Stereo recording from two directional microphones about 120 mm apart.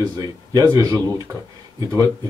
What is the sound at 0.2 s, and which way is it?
Speech, 30° right (ahead or behind).